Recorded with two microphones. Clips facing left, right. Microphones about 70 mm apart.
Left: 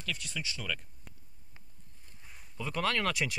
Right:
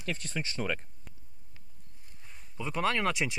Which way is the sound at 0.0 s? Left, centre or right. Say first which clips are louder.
Right 3 dB; right.